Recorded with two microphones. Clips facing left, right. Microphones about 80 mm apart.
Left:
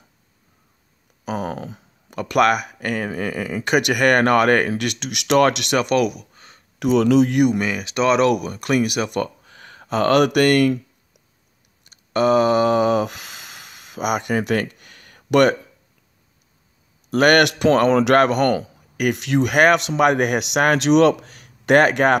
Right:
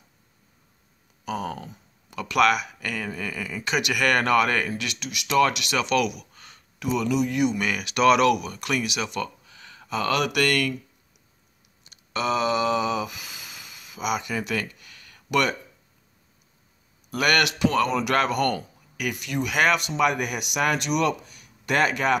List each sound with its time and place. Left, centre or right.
1.2 s a sound: left
2.0 s speech: left
6.8 s speech: left
7.6 s speech: left
11.9 s a sound: left
17.1 s a man's voice: left
18.1 s speech: left
19.5 s speech: left